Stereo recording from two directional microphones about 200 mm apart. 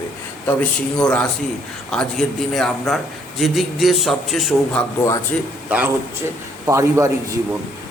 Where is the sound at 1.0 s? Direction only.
5° left (ahead or behind).